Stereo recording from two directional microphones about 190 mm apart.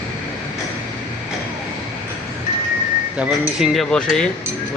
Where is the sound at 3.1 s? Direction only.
5° right (ahead or behind).